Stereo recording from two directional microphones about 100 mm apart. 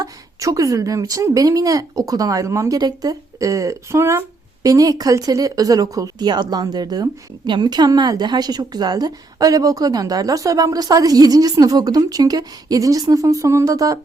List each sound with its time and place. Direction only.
0.0 s speech: 35° right (ahead or behind)